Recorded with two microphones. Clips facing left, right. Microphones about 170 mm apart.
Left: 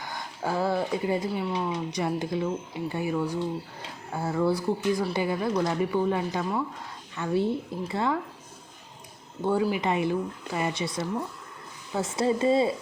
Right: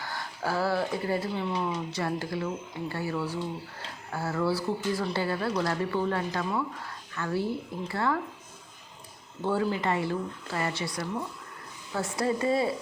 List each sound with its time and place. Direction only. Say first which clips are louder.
0.0 s speech: left 1 dB; 15° left (ahead or behind)
9.4 s speech: left 2 dB; 15° left (ahead or behind)